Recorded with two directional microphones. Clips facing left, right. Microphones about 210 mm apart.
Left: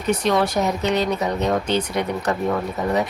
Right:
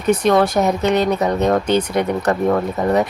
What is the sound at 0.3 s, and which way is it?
Speech, 55° right (ahead or behind).